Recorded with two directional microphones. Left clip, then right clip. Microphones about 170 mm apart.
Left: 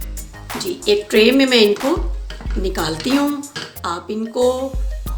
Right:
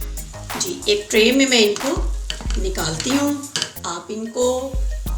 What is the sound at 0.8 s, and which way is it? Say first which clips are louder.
A woman's voice: left 3 dB; 55° left (ahead or behind).